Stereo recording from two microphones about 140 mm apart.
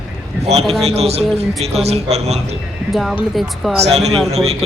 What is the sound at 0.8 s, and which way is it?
A man's voice, 50° right (ahead or behind).